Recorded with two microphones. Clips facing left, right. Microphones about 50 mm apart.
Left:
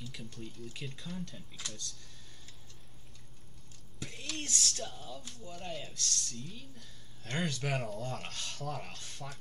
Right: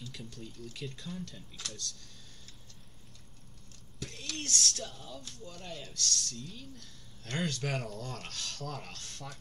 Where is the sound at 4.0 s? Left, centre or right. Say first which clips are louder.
Even; centre.